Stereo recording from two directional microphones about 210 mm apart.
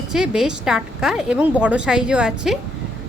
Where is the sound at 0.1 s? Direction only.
Centre (ahead or behind).